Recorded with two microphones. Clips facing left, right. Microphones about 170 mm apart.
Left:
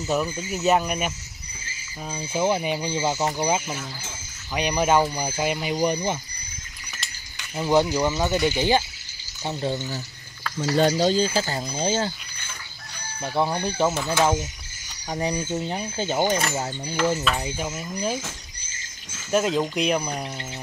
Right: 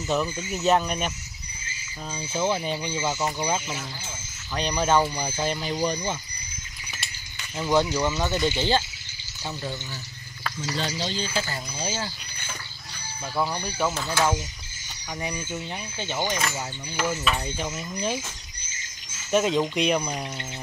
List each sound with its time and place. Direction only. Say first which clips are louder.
0.0 s speech: left 1 dB; 5° left (ahead or behind)
7.5 s speech: left 2 dB; 15° left (ahead or behind)
9.4 s speech: left 6 dB; 25° left (ahead or behind)
10.8 s speech: left 11 dB; 45° left (ahead or behind); by 12.1 s 30° left (ahead or behind)
13.2 s speech: left 4 dB; 25° left (ahead or behind)
15.0 s speech: left 6 dB; 35° left (ahead or behind)
17.4 s speech: left 2 dB; 10° left (ahead or behind)
19.3 s speech: even; centre (ahead or behind)